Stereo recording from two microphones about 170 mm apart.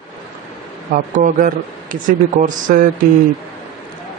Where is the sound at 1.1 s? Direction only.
50° right (ahead or behind).